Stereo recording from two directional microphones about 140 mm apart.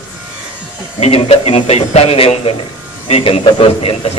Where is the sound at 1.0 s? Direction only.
45° left (ahead or behind).